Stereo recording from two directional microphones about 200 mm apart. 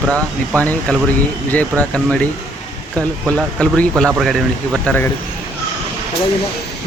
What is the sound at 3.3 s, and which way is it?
A man's voice, 5° left (ahead or behind).